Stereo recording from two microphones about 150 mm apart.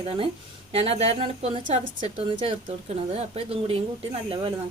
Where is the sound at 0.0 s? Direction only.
35° right (ahead or behind).